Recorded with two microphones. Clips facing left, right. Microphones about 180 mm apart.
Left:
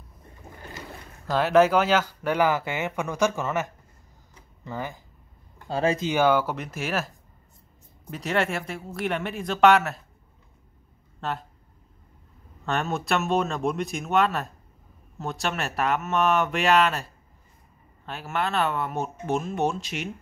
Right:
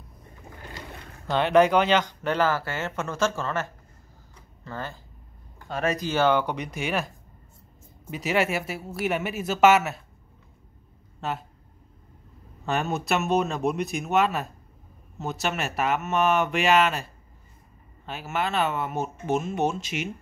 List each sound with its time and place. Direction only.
1.2 s speech: 5° left (ahead or behind)
5.7 s speech: 30° left (ahead or behind)
6.0 s speech: 10° left (ahead or behind)
8.1 s speech: centre (ahead or behind)
11.1 s speech: centre (ahead or behind)
12.6 s speech: centre (ahead or behind)